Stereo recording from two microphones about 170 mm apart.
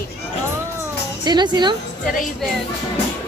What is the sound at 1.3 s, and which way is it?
Speech, 25° right (ahead or behind).